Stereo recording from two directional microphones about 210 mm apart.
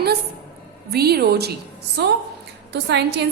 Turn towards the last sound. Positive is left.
turn(degrees=-55)  # may be behind; listen again after turning